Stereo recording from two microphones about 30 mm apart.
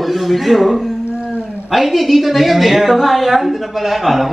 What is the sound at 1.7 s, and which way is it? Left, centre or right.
A man's voice, centre.